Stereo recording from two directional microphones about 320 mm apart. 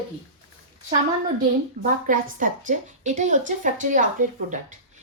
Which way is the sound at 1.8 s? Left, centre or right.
Right.